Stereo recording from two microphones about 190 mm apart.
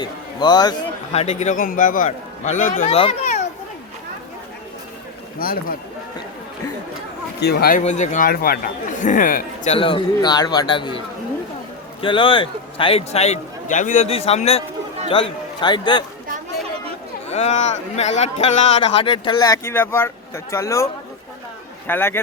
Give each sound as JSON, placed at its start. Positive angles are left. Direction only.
{"t": 0.0, "sound": "a man's voice", "side_deg": 25}
{"t": 1.1, "sound": "a man's voice", "side_deg": 35}
{"t": 2.9, "sound": "a sound", "side_deg": 30}
{"t": 5.4, "sound": "speech", "side_deg": 50}
{"t": 7.4, "sound": "speech", "side_deg": 55}
{"t": 9.7, "sound": "speech", "side_deg": 25}
{"t": 12.0, "sound": "a man's voice", "side_deg": 25}
{"t": 17.2, "sound": "a man's voice", "side_deg": 35}